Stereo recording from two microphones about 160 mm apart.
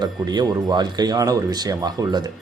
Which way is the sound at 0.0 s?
25° right (ahead or behind).